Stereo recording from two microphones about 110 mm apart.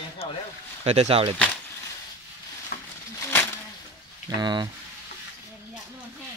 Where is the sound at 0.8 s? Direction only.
65° right (ahead or behind).